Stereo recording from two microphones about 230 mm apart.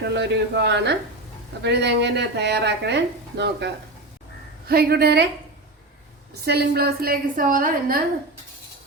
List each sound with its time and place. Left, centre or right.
0.0 s a woman's voice: right
4.7 s a woman's voice: right
6.4 s a woman's voice: right